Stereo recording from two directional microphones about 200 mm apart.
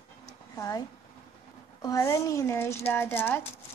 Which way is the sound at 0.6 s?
15° left (ahead or behind).